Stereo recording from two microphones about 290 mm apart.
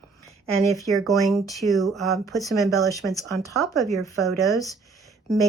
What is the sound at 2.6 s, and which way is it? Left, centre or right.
Speech, centre.